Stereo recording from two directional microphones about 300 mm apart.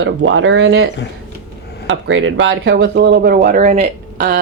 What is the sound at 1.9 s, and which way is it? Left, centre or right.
Speech, right.